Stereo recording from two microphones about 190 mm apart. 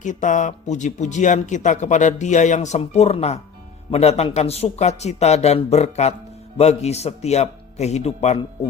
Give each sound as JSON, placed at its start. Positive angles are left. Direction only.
{"t": 0.0, "sound": "speech", "side_deg": 40}